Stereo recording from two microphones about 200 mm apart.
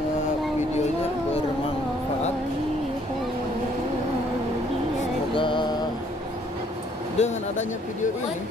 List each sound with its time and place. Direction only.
5.3 s music: 25° left (ahead or behind)
7.2 s speech: 35° left (ahead or behind)